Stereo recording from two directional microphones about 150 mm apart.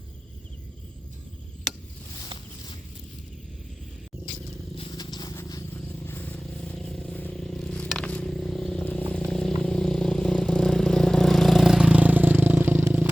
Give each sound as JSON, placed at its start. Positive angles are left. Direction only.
{"t": 4.9, "sound": "walk", "side_deg": 25}
{"t": 5.7, "sound": "vehicle", "side_deg": 10}